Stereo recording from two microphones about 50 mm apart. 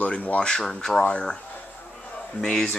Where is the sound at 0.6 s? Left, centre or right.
Centre.